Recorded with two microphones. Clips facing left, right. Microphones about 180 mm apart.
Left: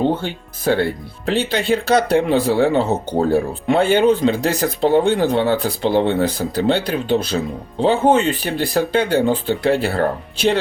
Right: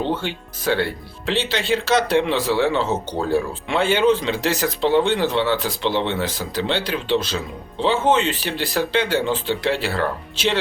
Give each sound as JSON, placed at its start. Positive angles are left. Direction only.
{"t": 0.0, "sound": "speech", "side_deg": 45}